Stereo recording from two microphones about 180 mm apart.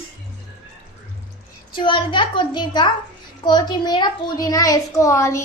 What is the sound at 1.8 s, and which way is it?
A child's voice, 25° left (ahead or behind).